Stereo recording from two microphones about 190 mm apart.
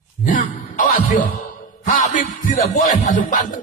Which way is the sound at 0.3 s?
40° left (ahead or behind).